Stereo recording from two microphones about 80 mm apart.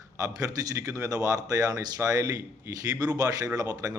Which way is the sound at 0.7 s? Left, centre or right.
Right.